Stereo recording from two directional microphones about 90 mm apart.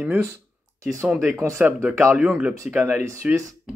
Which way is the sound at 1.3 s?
30° right (ahead or behind).